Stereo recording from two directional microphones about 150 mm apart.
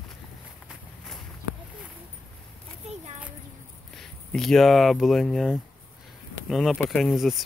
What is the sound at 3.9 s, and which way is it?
Speech, 5° left (ahead or behind).